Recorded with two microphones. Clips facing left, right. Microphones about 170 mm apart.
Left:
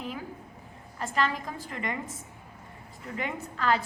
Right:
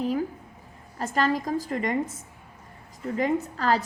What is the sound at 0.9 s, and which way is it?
A woman's voice, 40° right (ahead or behind).